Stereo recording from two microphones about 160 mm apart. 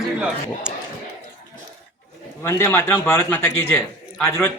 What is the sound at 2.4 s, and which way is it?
A man's voice, 15° left (ahead or behind).